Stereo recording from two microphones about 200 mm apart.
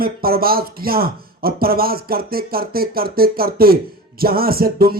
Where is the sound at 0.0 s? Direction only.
50° right (ahead or behind).